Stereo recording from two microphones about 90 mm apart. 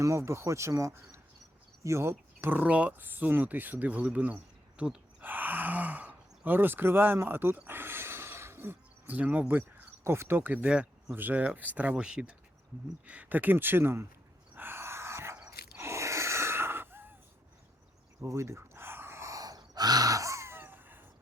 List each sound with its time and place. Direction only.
0.0 s speech: 35° right (ahead or behind); by 4.9 s 10° right (ahead or behind)
5.2 s a sound: 20° right (ahead or behind)
9.5 s speech: 20° right (ahead or behind)
14.5 s a sound: 25° right (ahead or behind)
15.4 s gasp: 30° right (ahead or behind)
18.2 s gasp: 30° right (ahead or behind)